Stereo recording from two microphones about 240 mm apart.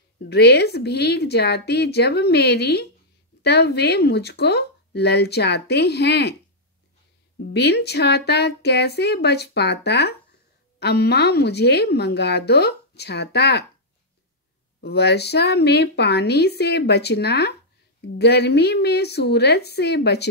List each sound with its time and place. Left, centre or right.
0.3 s a woman's voice: left
7.5 s a woman's voice: left
14.8 s a woman's voice: left